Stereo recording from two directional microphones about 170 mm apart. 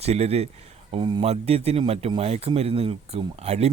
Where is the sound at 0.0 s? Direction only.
40° right (ahead or behind).